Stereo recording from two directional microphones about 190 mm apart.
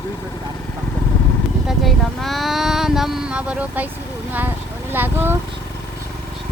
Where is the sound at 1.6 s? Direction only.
Centre (ahead or behind).